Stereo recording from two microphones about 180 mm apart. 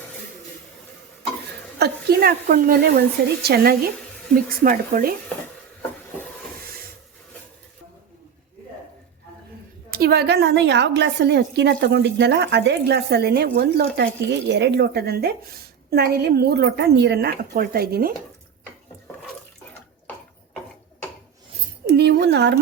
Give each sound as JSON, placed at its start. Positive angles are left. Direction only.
{"t": 1.8, "sound": "a woman's voice", "side_deg": -60}
{"t": 9.9, "sound": "a woman's voice", "side_deg": -60}
{"t": 21.8, "sound": "a sound", "side_deg": -65}